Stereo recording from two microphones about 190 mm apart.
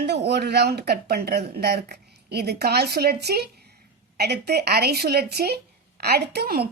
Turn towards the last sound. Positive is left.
turn(degrees=-55)  # may be behind; listen again after turning